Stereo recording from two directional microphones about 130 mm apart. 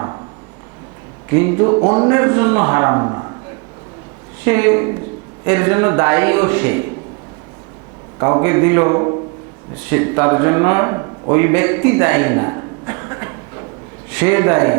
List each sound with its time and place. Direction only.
1.3 s a man's voice: 20° right (ahead or behind)
4.4 s a man's voice: 20° right (ahead or behind)
8.2 s a man's voice: 25° right (ahead or behind)